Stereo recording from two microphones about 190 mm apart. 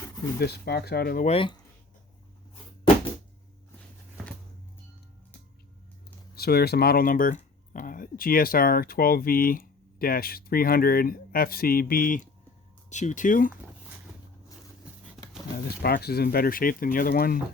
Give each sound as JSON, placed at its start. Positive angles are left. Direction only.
{"t": 0.3, "sound": "speech", "side_deg": 55}
{"t": 1.3, "sound": "speech", "side_deg": 25}
{"t": 6.3, "sound": "speech", "side_deg": 55}
{"t": 15.2, "sound": "a sound", "side_deg": 0}
{"t": 15.5, "sound": "speech", "side_deg": 55}